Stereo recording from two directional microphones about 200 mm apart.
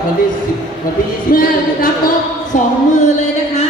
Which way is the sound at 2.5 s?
40° left (ahead or behind).